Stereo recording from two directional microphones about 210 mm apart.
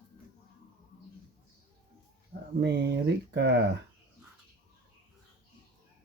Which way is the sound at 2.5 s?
55° right (ahead or behind).